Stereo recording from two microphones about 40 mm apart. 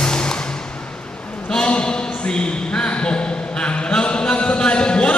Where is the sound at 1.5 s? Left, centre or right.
Left.